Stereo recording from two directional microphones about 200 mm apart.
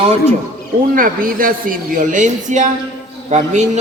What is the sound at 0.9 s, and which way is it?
A man's voice, 45° right (ahead or behind).